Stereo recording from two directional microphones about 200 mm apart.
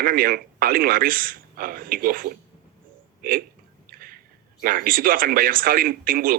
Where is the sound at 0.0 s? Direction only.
45° right (ahead or behind).